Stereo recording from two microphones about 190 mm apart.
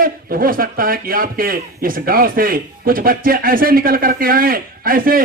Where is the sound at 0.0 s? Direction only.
50° right (ahead or behind).